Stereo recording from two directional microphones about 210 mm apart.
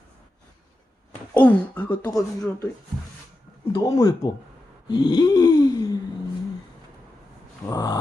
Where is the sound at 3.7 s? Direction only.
20° left (ahead or behind).